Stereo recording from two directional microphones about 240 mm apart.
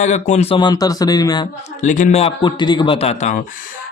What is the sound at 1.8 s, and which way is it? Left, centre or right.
A man's voice, left.